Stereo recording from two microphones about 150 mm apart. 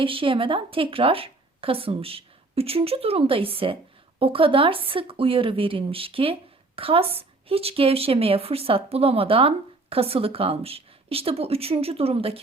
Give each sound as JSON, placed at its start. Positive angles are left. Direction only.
{"t": 0.0, "sound": "a woman's voice", "side_deg": -35}